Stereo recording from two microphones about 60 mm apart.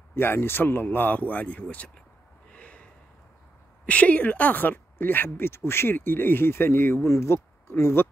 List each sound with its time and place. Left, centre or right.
0.1 s speech: left
2.5 s snort: centre
3.8 s speech: left